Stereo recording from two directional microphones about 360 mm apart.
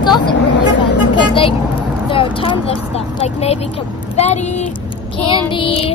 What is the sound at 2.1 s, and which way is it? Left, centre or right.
Speech, centre.